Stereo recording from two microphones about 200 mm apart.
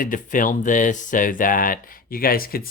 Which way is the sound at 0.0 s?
40° left (ahead or behind).